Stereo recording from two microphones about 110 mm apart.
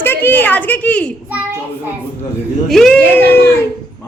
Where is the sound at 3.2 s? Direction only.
20° left (ahead or behind).